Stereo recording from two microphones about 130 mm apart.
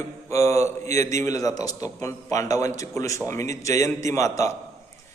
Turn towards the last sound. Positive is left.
turn(degrees=25)  # may be behind; listen again after turning